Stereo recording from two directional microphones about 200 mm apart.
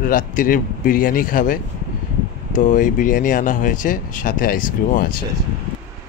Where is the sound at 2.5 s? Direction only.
40° left (ahead or behind).